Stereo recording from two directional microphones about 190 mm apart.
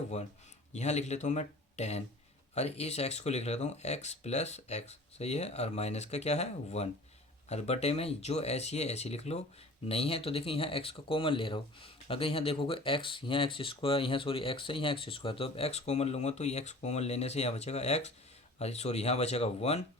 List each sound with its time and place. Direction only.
0.1 s speech: 35° left (ahead or behind)